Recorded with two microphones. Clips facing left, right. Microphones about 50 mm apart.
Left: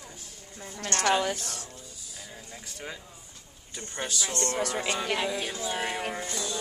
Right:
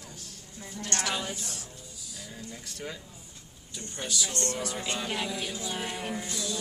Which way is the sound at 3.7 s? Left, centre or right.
Left.